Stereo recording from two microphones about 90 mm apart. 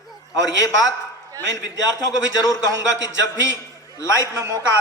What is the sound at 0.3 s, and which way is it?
Speech, 40° left (ahead or behind).